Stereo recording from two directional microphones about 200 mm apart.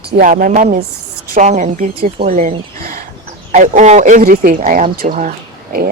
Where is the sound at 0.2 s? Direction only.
45° right (ahead or behind).